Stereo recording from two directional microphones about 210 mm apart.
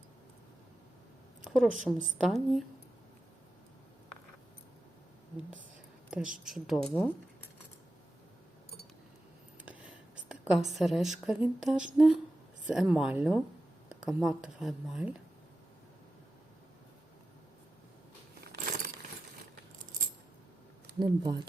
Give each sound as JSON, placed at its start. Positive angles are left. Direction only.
{"t": 1.5, "sound": "speech", "side_deg": 0}
{"t": 6.1, "sound": "speech", "side_deg": -5}
{"t": 9.6, "sound": "a woman's voice", "side_deg": -5}
{"t": 18.3, "sound": "a sound", "side_deg": -45}
{"t": 21.0, "sound": "speech", "side_deg": -20}